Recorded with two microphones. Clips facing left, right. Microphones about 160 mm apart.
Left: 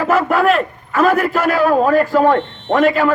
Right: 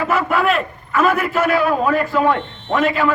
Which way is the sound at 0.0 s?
40° left (ahead or behind).